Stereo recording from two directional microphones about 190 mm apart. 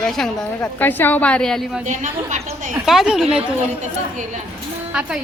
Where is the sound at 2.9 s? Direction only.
Centre (ahead or behind).